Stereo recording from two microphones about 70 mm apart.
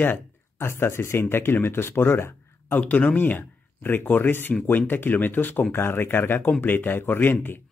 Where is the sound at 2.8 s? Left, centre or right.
Centre.